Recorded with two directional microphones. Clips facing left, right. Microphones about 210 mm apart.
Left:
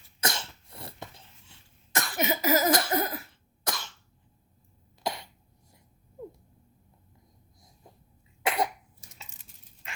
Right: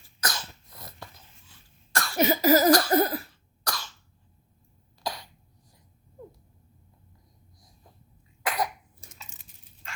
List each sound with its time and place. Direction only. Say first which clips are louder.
0.2 s cough: left 2 dB; 25° left (ahead or behind)
2.1 s cough: right 6 dB; 35° right (ahead or behind)
2.6 s cough: right 5 dB; 20° left (ahead or behind)
2.9 s cough: right 6 dB; 35° right (ahead or behind)
3.6 s cough: even; 25° left (ahead or behind)
5.0 s cough: left 1 dB; 25° left (ahead or behind)
8.4 s cough: left 1 dB; 25° left (ahead or behind)